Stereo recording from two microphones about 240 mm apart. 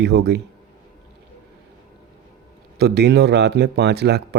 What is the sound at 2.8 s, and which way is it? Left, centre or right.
Speech, right.